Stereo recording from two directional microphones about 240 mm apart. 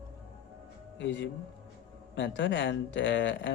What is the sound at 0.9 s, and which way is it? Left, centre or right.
Speech, left.